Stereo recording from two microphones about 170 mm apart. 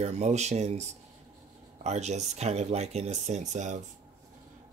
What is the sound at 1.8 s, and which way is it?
Speech, 40° right (ahead or behind).